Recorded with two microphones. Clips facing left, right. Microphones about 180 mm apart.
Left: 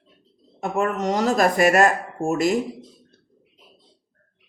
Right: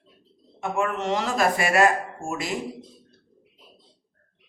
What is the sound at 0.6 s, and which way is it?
A man's voice, 40° left (ahead or behind).